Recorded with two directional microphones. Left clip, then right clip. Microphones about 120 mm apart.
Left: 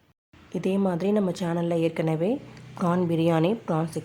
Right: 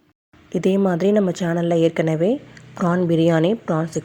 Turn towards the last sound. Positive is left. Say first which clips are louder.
# right 5 dB
turn(degrees=-25)  # may be behind; listen again after turning